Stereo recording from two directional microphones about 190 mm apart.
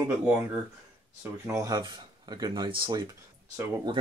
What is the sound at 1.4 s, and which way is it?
Speech, 15° right (ahead or behind).